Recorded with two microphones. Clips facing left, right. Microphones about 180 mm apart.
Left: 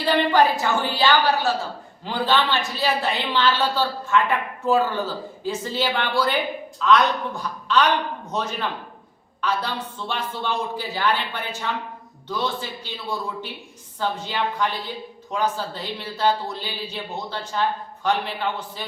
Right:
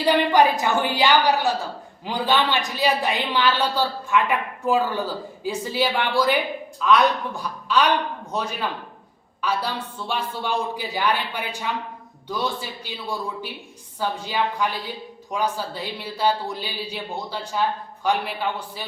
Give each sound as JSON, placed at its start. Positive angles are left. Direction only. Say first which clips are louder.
{"t": 0.0, "sound": "a woman's voice", "louder": "right 1 dB", "side_deg": -15}